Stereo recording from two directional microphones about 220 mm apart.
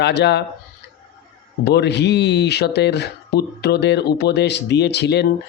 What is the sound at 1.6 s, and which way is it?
Speech, 50° left (ahead or behind).